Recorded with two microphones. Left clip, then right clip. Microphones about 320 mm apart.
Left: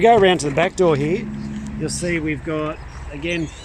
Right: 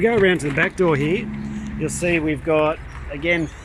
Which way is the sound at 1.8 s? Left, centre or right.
Centre.